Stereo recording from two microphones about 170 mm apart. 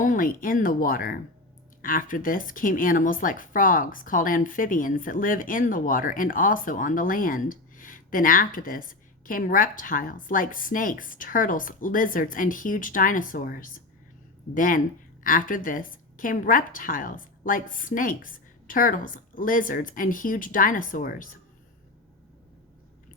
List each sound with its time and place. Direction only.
0.0 s speech: 55° left (ahead or behind)